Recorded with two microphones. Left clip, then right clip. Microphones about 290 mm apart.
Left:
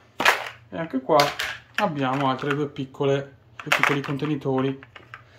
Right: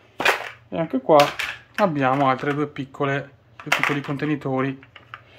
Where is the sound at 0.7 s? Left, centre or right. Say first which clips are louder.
Right 5 dB; right; by 3.3 s centre.